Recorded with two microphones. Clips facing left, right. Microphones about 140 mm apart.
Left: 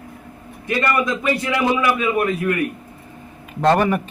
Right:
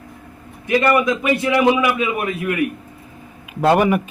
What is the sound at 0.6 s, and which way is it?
Speech, 20° right (ahead or behind).